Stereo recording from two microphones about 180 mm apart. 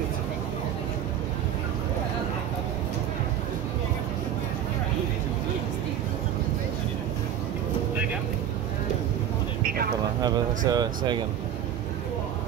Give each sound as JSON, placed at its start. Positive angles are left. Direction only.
{"t": 10.7, "sound": "speech", "side_deg": -20}